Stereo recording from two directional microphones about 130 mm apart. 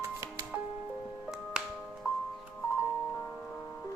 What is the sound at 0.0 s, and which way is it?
Music, 20° right (ahead or behind).